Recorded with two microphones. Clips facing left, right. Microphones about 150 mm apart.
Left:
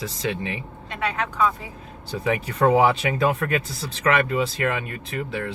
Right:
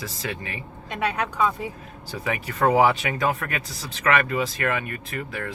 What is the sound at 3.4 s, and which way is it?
Speech, 30° left (ahead or behind).